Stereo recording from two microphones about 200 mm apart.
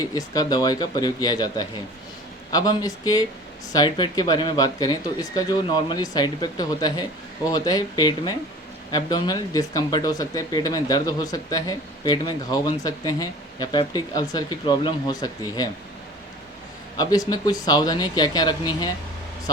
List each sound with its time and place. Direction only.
0.0 s speech: 20° left (ahead or behind)
17.0 s speech: 20° left (ahead or behind)